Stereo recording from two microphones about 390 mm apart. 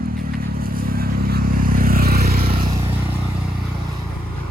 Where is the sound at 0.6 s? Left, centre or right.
Right.